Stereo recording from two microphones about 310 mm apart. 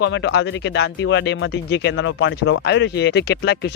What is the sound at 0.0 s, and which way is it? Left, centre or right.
Speech, left.